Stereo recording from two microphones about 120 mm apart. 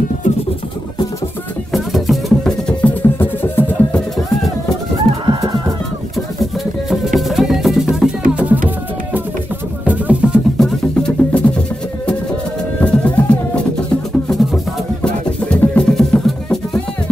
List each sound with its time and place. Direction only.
1.7 s music: centre (ahead or behind)
2.8 s music: 15° left (ahead or behind)
5.2 s chicken: 35° right (ahead or behind)
6.1 s music: centre (ahead or behind)
10.6 s music: 5° left (ahead or behind)
12.8 s music: 10° left (ahead or behind)
15.0 s music: 10° left (ahead or behind)